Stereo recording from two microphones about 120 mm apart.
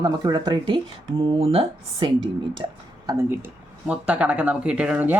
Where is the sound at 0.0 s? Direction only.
30° right (ahead or behind).